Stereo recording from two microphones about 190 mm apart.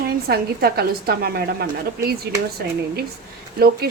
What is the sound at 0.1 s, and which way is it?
A woman's voice, 55° right (ahead or behind).